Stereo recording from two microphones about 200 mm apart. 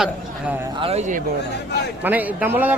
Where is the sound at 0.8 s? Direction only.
30° right (ahead or behind).